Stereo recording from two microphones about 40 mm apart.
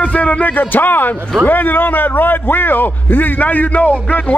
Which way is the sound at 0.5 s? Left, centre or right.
Left.